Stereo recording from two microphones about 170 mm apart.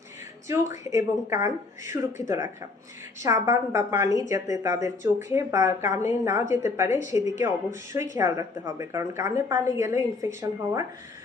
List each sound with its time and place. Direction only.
0.4 s a woman's voice: 15° right (ahead or behind)